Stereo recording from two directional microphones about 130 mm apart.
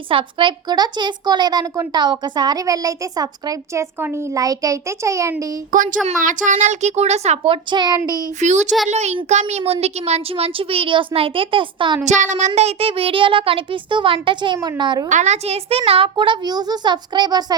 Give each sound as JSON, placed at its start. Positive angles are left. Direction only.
{"t": 0.1, "sound": "a woman's voice", "side_deg": -40}
{"t": 5.7, "sound": "a woman's voice", "side_deg": -90}
{"t": 8.4, "sound": "a woman's voice", "side_deg": -65}
{"t": 12.0, "sound": "a child's voice", "side_deg": -70}
{"t": 15.1, "sound": "a woman's voice", "side_deg": -65}